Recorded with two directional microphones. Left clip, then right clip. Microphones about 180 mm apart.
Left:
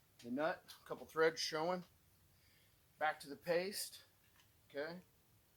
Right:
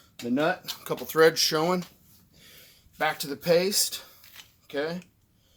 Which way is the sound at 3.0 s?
60° right (ahead or behind).